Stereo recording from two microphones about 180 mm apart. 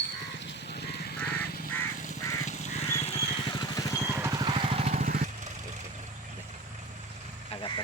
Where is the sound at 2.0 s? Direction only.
40° left (ahead or behind); by 4.0 s 20° left (ahead or behind).